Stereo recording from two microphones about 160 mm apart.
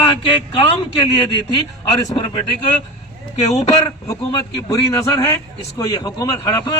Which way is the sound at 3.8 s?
25° left (ahead or behind).